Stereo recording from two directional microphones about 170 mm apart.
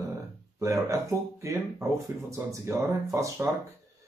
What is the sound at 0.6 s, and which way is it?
Speech, 20° right (ahead or behind).